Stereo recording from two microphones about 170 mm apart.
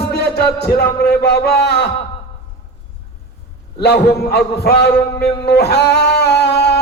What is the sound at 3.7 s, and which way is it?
A man's voice, 70° left (ahead or behind).